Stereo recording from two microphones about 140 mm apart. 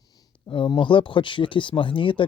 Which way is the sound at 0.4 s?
35° left (ahead or behind).